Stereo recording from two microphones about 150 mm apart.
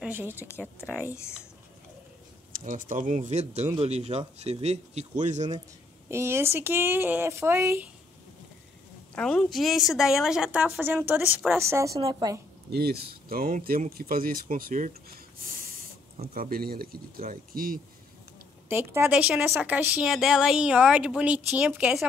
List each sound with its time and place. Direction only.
0.0 s speech: 15° right (ahead or behind)
0.5 s speech: 15° left (ahead or behind)
2.5 s speech: 60° right (ahead or behind)
6.0 s a woman's voice: 15° right (ahead or behind)
9.1 s a woman's voice: 5° left (ahead or behind); by 12.4 s 25° right (ahead or behind)
12.7 s speech: 90° right; by 14.9 s 65° right (ahead or behind)
16.3 s speech: 80° right
18.7 s a woman's voice: 15° right (ahead or behind)